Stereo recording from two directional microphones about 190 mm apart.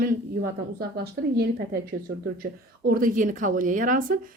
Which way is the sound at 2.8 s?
45° right (ahead or behind).